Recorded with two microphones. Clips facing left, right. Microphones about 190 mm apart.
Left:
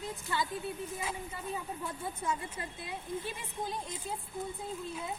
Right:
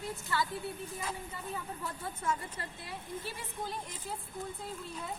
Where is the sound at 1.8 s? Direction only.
15° left (ahead or behind).